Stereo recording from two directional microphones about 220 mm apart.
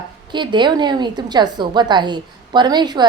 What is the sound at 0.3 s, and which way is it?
A woman's voice, 20° right (ahead or behind).